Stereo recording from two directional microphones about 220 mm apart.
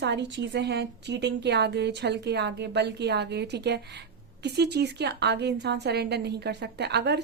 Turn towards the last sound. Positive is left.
turn(degrees=-50)  # may be behind; listen again after turning